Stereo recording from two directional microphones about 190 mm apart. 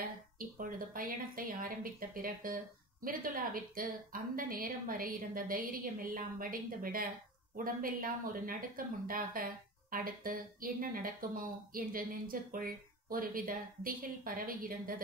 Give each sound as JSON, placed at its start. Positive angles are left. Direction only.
{"t": 0.4, "sound": "speech", "side_deg": -45}